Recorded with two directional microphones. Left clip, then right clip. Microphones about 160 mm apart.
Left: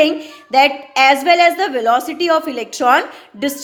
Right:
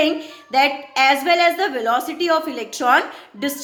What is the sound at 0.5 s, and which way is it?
A woman's voice, 40° left (ahead or behind).